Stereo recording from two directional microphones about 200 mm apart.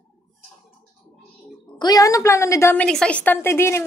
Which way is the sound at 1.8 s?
15° left (ahead or behind).